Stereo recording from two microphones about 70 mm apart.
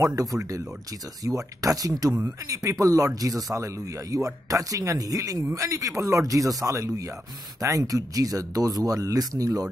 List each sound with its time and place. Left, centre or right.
0.0 s speech: right